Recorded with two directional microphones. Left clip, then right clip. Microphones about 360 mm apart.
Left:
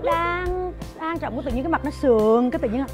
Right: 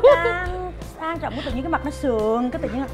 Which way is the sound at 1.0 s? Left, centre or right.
Left.